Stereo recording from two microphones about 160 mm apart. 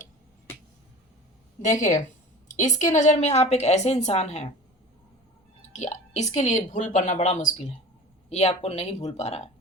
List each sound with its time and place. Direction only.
1.6 s a woman's voice: 50° left (ahead or behind)
5.7 s a woman's voice: 45° left (ahead or behind)